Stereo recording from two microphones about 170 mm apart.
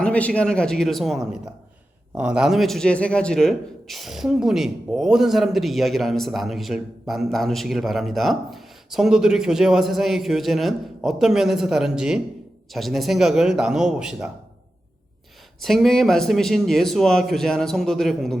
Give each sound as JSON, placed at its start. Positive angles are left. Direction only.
{"t": 0.0, "sound": "a man's voice", "side_deg": 5}
{"t": 15.6, "sound": "a man's voice", "side_deg": 0}